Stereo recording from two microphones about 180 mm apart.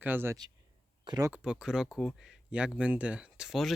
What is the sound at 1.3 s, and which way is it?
Speech, 5° right (ahead or behind).